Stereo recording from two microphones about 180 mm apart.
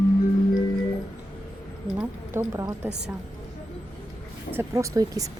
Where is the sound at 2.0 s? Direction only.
15° right (ahead or behind).